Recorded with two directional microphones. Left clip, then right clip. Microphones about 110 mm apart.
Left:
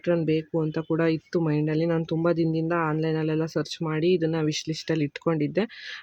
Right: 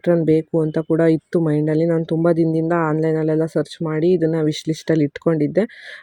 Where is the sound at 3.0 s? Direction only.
25° right (ahead or behind).